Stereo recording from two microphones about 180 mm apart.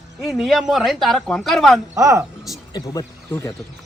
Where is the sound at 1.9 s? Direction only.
15° right (ahead or behind).